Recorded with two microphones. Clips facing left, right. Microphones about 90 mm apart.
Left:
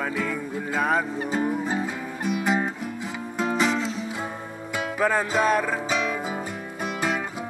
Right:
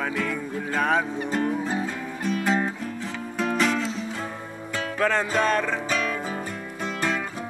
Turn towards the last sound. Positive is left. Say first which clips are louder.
# even
turn(degrees=10)  # may be behind; listen again after turning